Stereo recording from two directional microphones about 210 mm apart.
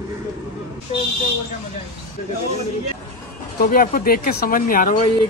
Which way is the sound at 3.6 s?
45° left (ahead or behind).